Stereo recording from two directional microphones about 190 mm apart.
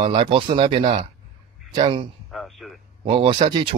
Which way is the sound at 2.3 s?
Centre (ahead or behind).